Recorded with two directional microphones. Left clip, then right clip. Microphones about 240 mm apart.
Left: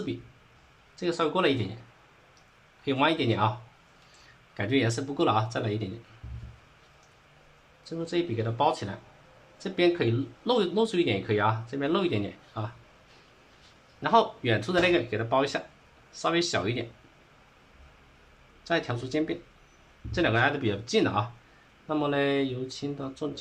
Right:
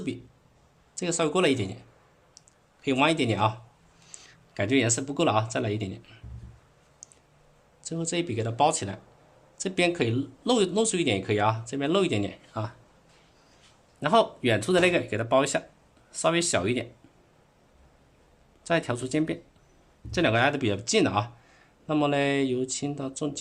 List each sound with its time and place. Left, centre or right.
0.9 s speech: right
2.8 s speech: right
4.5 s speech: right
7.9 s speech: right
14.0 s speech: right
18.7 s speech: right